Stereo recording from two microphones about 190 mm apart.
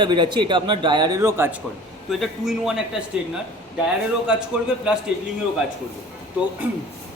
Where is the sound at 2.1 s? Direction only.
Centre (ahead or behind).